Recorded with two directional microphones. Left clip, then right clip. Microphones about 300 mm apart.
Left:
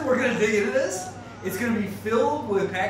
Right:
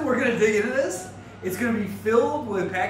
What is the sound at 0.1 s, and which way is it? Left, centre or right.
A man's voice, centre.